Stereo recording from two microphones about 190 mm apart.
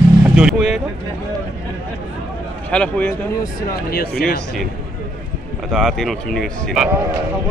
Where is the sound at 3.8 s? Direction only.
55° left (ahead or behind).